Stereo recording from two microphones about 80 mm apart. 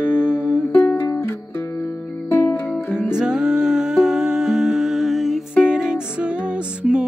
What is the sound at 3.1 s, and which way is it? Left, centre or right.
Humming, centre.